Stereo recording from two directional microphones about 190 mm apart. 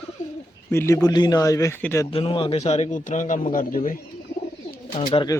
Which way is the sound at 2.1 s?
30° left (ahead or behind).